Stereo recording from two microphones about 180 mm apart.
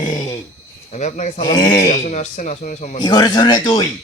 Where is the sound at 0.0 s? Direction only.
20° left (ahead or behind).